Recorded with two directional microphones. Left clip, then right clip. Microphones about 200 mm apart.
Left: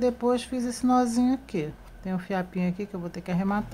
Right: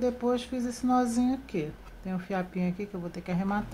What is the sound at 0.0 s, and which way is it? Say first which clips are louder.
Speech: left 4 dB; 20° left (ahead or behind).